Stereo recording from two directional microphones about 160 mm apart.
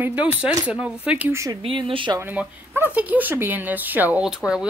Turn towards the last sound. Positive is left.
turn(degrees=-5)  # may be behind; listen again after turning